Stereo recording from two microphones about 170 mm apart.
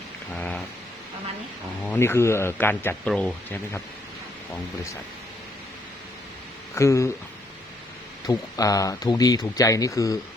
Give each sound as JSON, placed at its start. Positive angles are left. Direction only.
{"t": 0.3, "sound": "a sound", "side_deg": 10}
{"t": 1.8, "sound": "speech", "side_deg": 10}
{"t": 6.7, "sound": "speech", "side_deg": 15}
{"t": 8.3, "sound": "speech", "side_deg": 20}